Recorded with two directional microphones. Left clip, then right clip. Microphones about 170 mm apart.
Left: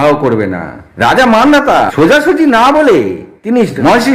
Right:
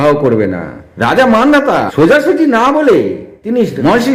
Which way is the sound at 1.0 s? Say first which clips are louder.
Left 2 dB; 15° left (ahead or behind).